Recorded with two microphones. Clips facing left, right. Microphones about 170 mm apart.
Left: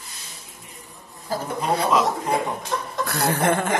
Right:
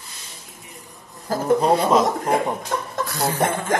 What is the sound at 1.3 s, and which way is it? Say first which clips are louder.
Speech: right 7 dB; 40° right (ahead or behind).